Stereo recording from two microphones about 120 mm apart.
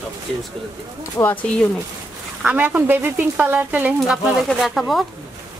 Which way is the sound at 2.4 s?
15° right (ahead or behind).